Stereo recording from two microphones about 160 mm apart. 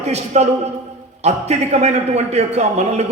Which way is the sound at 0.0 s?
40° right (ahead or behind).